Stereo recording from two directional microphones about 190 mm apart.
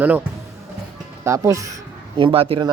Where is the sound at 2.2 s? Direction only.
30° right (ahead or behind).